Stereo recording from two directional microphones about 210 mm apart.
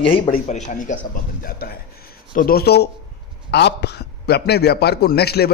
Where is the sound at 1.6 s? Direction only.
45° left (ahead or behind).